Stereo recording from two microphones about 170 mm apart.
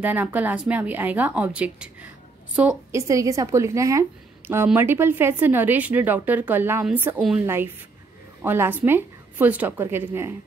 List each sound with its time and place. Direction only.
0.0 s a woman's voice: 10° right (ahead or behind)
2.9 s a woman's voice: 20° right (ahead or behind)